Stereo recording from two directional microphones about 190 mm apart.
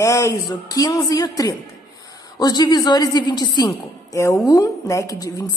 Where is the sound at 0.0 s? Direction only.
15° left (ahead or behind).